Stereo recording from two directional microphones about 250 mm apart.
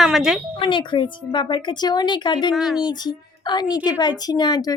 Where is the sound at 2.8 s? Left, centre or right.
Centre.